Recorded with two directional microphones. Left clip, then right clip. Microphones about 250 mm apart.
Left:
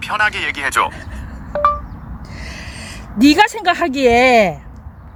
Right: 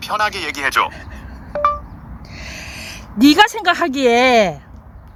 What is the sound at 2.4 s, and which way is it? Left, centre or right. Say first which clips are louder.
Speech: right 1 dB; centre.